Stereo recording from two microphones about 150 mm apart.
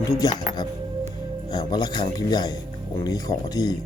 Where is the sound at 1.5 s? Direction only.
25° left (ahead or behind).